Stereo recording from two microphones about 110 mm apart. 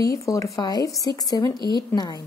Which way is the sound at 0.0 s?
30° left (ahead or behind).